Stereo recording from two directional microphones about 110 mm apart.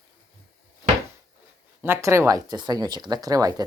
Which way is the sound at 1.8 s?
25° right (ahead or behind).